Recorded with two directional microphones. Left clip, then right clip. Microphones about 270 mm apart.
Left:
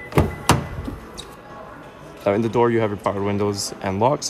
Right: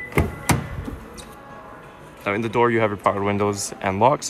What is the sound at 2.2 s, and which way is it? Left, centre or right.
Speech, centre.